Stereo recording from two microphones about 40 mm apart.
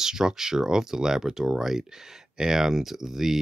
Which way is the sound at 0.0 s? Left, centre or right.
Centre.